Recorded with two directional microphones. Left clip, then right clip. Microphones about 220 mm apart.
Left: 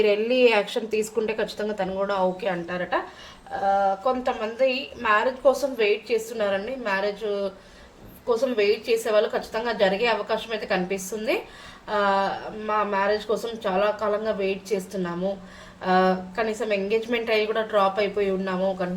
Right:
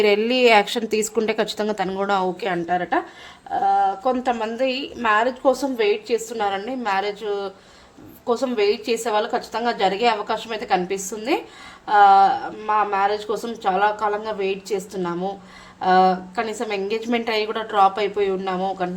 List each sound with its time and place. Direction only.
0.0 s a woman's voice: 50° right (ahead or behind)